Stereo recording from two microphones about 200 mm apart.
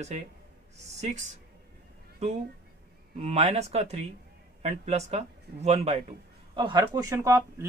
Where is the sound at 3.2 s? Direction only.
30° right (ahead or behind).